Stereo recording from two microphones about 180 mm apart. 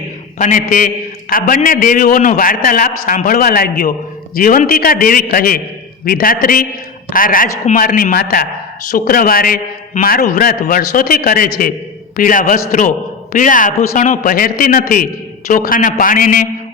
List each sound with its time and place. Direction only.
0.3 s a man's voice: 45° left (ahead or behind)